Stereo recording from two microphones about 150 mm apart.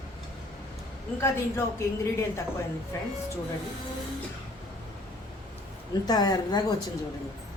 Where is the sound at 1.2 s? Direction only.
20° left (ahead or behind).